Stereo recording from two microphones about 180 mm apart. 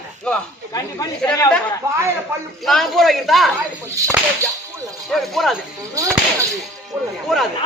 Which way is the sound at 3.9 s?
15° right (ahead or behind).